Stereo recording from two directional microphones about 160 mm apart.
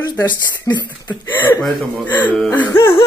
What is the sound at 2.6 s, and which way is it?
Music, 25° left (ahead or behind).